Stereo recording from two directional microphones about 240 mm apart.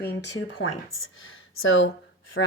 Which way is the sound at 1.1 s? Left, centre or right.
Left.